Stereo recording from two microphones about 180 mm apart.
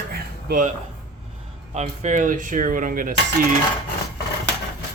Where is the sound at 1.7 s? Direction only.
40° right (ahead or behind).